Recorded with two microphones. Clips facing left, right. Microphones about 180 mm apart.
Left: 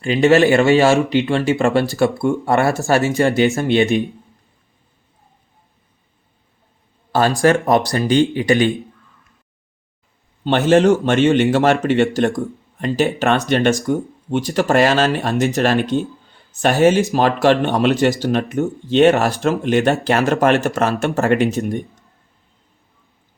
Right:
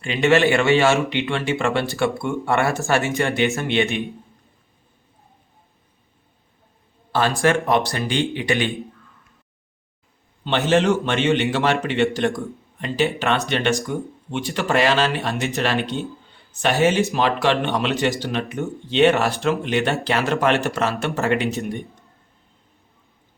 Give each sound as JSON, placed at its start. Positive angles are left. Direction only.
{"t": 0.0, "sound": "a man's voice", "side_deg": 40}
{"t": 7.1, "sound": "a man's voice", "side_deg": 40}
{"t": 10.7, "sound": "a man's voice", "side_deg": 40}